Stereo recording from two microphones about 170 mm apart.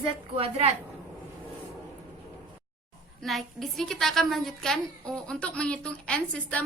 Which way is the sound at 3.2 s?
Centre (ahead or behind).